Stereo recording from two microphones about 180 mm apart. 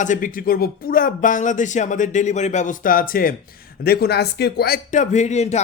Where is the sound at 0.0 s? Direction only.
45° left (ahead or behind).